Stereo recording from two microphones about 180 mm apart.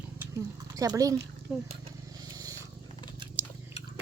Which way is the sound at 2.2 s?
20° right (ahead or behind).